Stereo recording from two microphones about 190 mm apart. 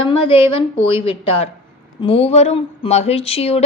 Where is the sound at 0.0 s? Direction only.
30° left (ahead or behind).